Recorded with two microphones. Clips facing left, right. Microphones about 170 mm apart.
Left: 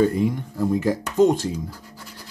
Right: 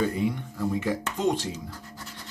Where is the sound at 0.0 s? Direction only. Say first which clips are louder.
Left 6 dB; 45° left (ahead or behind).